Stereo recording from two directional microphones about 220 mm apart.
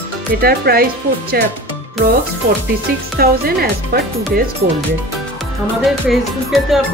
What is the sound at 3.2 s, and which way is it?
Music, 45° right (ahead or behind).